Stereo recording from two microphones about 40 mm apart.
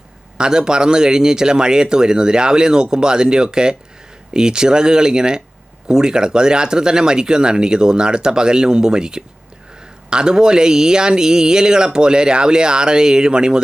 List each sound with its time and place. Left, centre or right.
0.3 s speech: centre